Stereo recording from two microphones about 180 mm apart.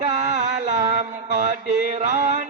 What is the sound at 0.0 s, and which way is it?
Mantra, 40° right (ahead or behind).